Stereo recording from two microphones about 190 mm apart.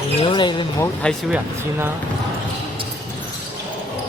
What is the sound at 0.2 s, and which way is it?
Speech, 25° left (ahead or behind).